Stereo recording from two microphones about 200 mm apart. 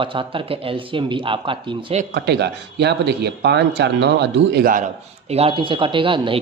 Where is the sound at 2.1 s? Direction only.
55° right (ahead or behind).